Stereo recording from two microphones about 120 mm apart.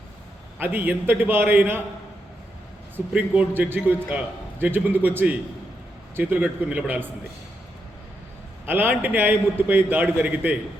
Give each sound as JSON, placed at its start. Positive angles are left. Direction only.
{"t": 0.6, "sound": "a man's voice", "side_deg": -15}
{"t": 2.9, "sound": "a man's voice", "side_deg": -10}
{"t": 8.6, "sound": "a man's voice", "side_deg": -15}